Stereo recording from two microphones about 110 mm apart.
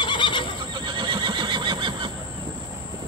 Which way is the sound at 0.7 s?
45° right (ahead or behind).